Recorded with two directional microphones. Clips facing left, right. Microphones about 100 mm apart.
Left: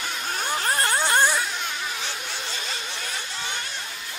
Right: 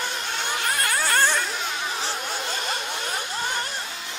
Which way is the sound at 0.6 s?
30° left (ahead or behind).